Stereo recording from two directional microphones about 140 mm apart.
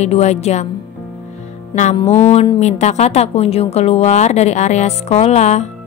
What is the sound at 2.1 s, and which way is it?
A woman's voice, 50° left (ahead or behind).